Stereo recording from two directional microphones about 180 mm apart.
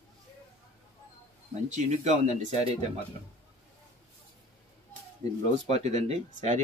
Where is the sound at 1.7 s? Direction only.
40° right (ahead or behind).